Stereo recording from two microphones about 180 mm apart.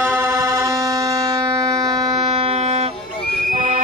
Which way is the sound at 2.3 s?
35° right (ahead or behind).